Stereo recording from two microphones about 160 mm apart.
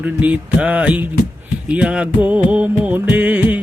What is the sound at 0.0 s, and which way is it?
Music, 10° right (ahead or behind).